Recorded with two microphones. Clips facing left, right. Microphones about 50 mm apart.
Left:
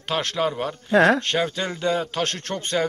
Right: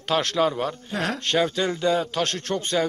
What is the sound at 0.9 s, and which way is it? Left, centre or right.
Speech, left.